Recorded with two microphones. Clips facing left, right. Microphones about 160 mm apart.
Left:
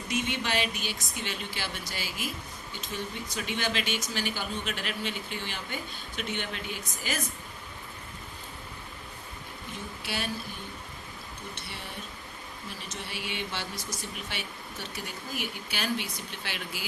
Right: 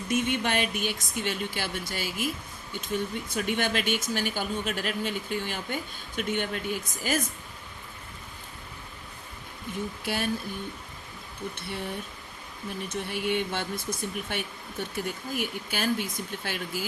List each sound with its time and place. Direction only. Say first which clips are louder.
0.1 s speech: right 4 dB; 50° right (ahead or behind)
10.0 s speech: right 3 dB; 50° right (ahead or behind)
12.9 s speech: right 10 dB; 55° right (ahead or behind)